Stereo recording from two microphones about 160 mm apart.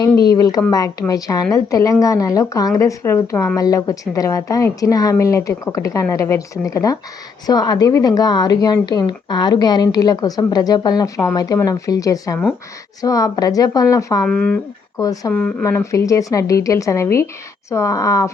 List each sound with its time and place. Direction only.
0.3 s a woman's voice: 25° left (ahead or behind)
14.3 s speech: 5° left (ahead or behind)
14.9 s a woman's voice: 20° left (ahead or behind)
15.3 s speech: 10° left (ahead or behind)
15.6 s a woman's voice: 20° left (ahead or behind)